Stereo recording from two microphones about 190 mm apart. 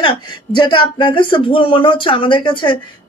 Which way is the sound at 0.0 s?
25° left (ahead or behind).